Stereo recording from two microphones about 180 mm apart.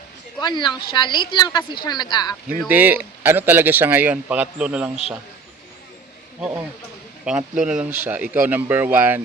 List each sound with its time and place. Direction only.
0.3 s a woman's voice: 25° left (ahead or behind)
2.6 s speech: 10° right (ahead or behind)
7.3 s speech: 5° right (ahead or behind)